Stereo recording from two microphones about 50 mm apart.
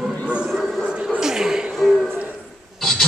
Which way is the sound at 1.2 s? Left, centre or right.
Centre.